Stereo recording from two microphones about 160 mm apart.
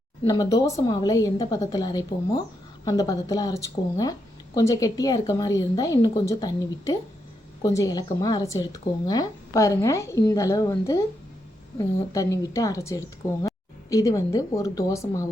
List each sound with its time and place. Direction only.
0.3 s speech: 20° left (ahead or behind)
12.1 s speech: 20° left (ahead or behind)